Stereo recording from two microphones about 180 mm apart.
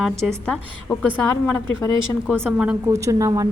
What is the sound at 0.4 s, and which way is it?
Speech, 5° left (ahead or behind).